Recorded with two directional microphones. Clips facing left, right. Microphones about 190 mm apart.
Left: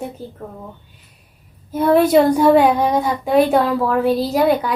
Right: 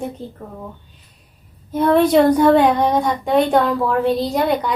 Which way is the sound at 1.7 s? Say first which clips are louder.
Left 1 dB; 5° left (ahead or behind).